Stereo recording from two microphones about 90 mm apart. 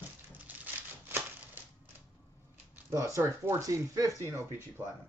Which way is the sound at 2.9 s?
35° right (ahead or behind).